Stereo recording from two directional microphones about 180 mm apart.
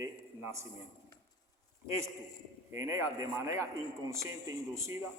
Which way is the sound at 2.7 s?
15° right (ahead or behind).